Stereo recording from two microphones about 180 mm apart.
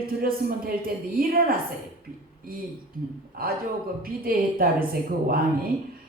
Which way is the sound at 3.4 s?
55° right (ahead or behind).